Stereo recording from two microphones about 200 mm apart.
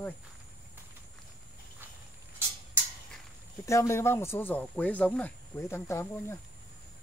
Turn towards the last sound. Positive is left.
turn(degrees=10)  # may be behind; listen again after turning